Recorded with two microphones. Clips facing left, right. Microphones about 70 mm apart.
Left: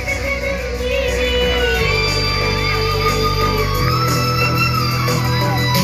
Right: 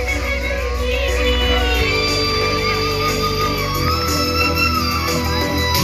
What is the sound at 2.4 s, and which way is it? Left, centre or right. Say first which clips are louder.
Music: right 1 dB; left.